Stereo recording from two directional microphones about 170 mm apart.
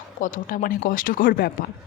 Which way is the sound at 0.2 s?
50° left (ahead or behind).